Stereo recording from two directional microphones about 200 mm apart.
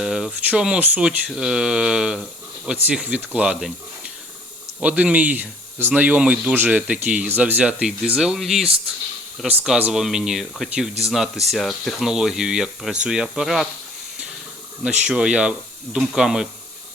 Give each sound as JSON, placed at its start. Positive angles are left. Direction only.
{"t": 0.0, "sound": "speech", "side_deg": -5}
{"t": 14.8, "sound": "speech", "side_deg": -5}